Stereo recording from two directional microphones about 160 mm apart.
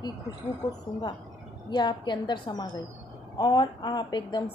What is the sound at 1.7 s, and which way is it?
A woman's voice, 25° left (ahead or behind).